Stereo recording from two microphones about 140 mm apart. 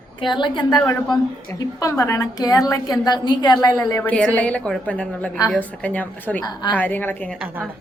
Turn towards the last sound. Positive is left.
turn(degrees=-10)  # may be behind; listen again after turning